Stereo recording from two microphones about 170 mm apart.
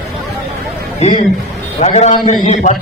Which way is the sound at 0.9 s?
40° left (ahead or behind).